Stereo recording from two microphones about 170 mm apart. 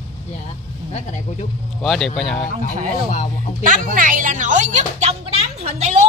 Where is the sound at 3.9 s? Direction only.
50° right (ahead or behind).